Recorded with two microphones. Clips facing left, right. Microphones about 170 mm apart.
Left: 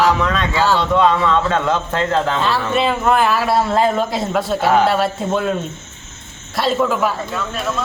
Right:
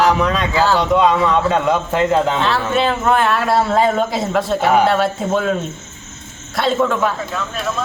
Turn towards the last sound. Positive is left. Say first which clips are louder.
# even
turn(degrees=5)  # may be behind; listen again after turning